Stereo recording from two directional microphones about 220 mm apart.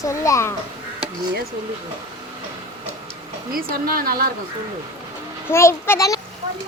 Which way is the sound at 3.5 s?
40° right (ahead or behind).